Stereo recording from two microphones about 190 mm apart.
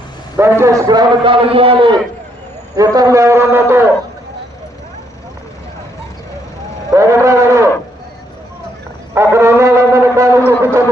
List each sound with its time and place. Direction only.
0.6 s a man's voice: 20° right (ahead or behind)
2.7 s shofar: 20° right (ahead or behind)
6.9 s cattle: 15° right (ahead or behind)
9.1 s shofar: 15° right (ahead or behind)
10.6 s music: 15° right (ahead or behind)